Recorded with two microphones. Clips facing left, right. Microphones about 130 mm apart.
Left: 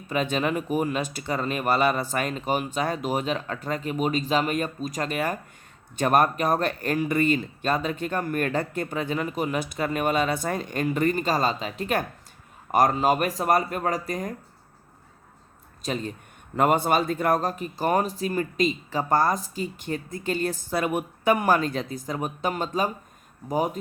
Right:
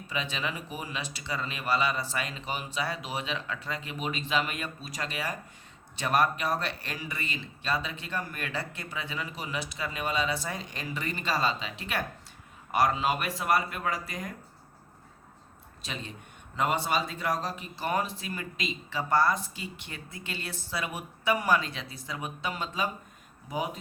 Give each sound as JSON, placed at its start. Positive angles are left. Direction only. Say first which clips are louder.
{"t": 0.1, "sound": "speech", "louder": "left 9 dB", "side_deg": 50}
{"t": 15.8, "sound": "speech", "louder": "left 10 dB", "side_deg": 45}